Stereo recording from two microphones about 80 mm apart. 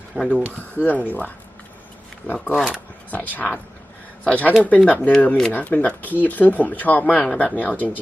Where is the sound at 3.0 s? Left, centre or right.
Centre.